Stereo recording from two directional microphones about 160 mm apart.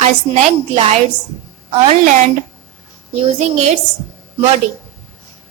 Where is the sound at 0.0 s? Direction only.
45° right (ahead or behind).